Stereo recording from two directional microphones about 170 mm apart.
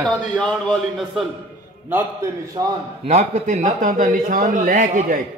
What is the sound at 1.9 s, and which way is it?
Speech, 15° right (ahead or behind).